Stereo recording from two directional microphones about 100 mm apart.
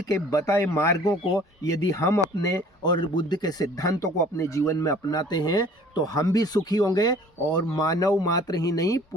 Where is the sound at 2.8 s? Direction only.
45° left (ahead or behind).